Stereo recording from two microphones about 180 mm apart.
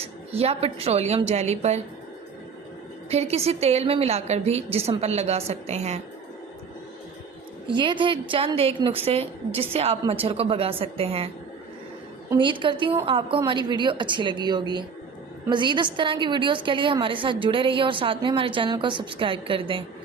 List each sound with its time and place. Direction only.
0.0 s a woman's voice: 35° right (ahead or behind)
3.1 s a woman's voice: 35° right (ahead or behind)
7.8 s a woman's voice: 25° right (ahead or behind)
12.3 s a woman's voice: 25° right (ahead or behind)